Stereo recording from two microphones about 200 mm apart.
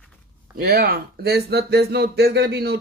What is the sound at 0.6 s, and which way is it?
Speech, 50° right (ahead or behind).